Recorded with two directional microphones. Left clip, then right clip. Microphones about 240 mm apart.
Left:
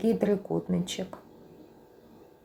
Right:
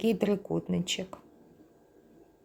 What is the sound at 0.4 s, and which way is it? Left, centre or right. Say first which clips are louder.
Speech: left 1 dB; right.